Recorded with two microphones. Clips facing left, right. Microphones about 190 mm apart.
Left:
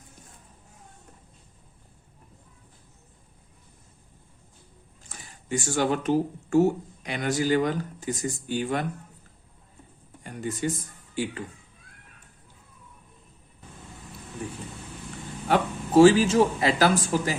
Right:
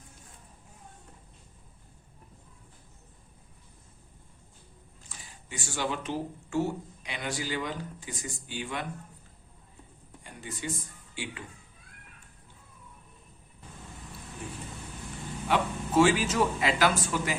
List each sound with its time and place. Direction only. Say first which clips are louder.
5.0 s speech: left 11 dB; 45° left (ahead or behind)
10.2 s speech: left 8 dB; 45° left (ahead or behind)
15.4 s speech: left 4 dB; 40° left (ahead or behind)